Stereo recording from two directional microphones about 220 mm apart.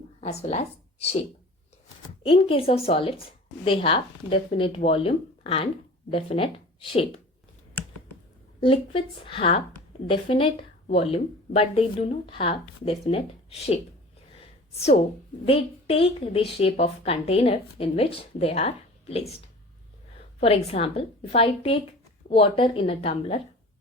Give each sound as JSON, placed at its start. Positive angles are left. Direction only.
{"t": 0.2, "sound": "speech", "side_deg": 30}
{"t": 2.2, "sound": "a woman's voice", "side_deg": 25}
{"t": 8.6, "sound": "a woman's voice", "side_deg": 25}
{"t": 14.8, "sound": "a woman's voice", "side_deg": 30}
{"t": 20.4, "sound": "a woman's voice", "side_deg": 25}